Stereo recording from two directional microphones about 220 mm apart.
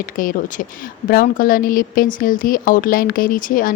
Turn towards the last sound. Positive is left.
turn(degrees=40)  # may be behind; listen again after turning